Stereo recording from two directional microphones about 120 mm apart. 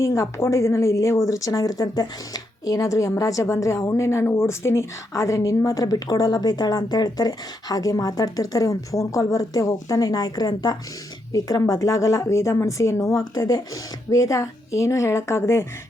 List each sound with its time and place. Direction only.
0.0 s speech: 25° left (ahead or behind)